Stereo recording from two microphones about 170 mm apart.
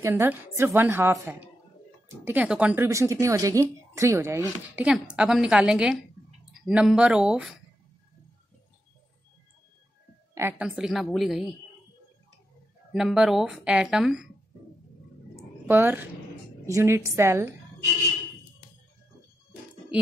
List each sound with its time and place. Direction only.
0.0 s speech: 15° right (ahead or behind)
10.6 s speech: centre (ahead or behind)
12.9 s speech: 5° right (ahead or behind)
15.6 s speech: 15° right (ahead or behind)